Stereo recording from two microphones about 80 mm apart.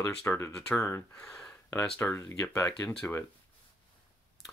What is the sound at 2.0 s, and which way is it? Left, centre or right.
Speech, left.